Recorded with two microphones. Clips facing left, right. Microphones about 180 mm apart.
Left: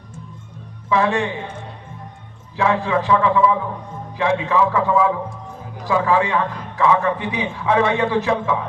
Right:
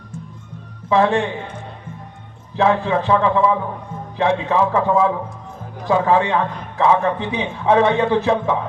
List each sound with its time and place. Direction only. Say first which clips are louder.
0.9 s a man's voice: right 3 dB; 35° right (ahead or behind)
2.6 s a man's voice: right 2 dB; 35° right (ahead or behind)